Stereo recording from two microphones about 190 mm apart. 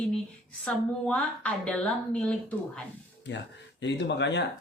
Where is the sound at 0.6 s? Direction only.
5° left (ahead or behind).